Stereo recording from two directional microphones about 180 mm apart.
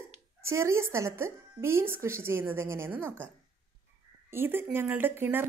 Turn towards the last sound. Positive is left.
turn(degrees=-10)  # may be behind; listen again after turning